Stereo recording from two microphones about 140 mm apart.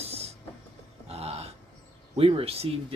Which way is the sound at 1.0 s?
45° right (ahead or behind).